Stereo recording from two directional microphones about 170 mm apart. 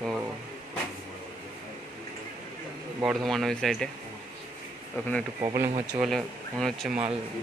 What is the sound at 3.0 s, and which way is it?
Speech, centre (ahead or behind).